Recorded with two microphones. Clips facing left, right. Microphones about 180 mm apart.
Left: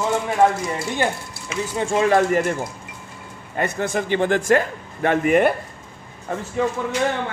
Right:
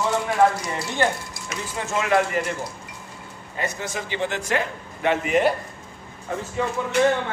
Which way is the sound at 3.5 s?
55° left (ahead or behind).